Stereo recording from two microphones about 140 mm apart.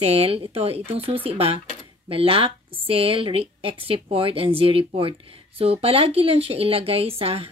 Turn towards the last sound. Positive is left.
turn(degrees=-45)  # may be behind; listen again after turning